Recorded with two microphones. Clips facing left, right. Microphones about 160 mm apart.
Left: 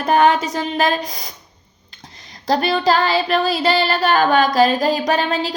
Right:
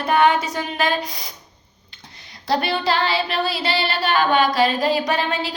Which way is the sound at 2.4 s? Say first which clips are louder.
Left 4 dB; 40° left (ahead or behind).